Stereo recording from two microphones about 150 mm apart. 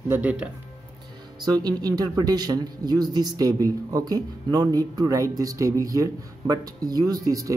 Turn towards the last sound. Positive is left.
turn(degrees=-25)  # may be behind; listen again after turning